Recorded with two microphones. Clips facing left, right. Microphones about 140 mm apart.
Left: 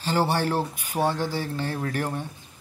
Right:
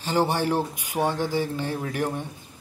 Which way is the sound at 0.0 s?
15° right (ahead or behind).